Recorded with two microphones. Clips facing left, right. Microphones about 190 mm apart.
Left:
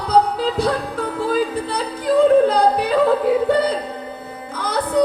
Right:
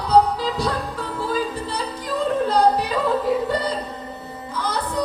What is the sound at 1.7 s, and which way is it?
Yodeling, 55° left (ahead or behind).